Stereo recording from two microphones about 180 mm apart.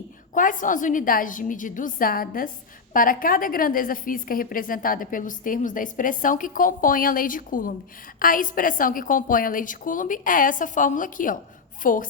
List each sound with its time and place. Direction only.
0.3 s a woman's voice: 45° left (ahead or behind)